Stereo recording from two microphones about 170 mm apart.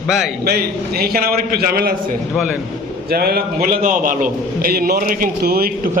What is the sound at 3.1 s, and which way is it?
Speech, 65° right (ahead or behind).